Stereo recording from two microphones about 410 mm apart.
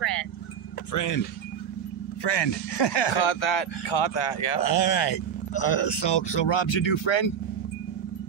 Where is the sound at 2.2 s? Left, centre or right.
Left.